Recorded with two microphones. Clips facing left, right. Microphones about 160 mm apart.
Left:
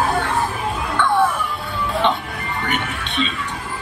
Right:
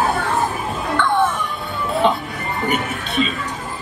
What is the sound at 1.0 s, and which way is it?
Music, 10° left (ahead or behind).